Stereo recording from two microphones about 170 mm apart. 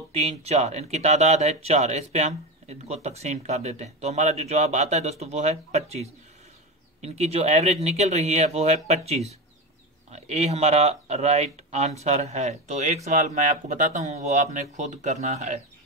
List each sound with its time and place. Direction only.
0.1 s speech: 40° right (ahead or behind)